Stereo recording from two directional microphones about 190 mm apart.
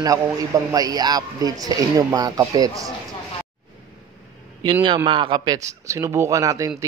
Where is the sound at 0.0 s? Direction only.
20° right (ahead or behind).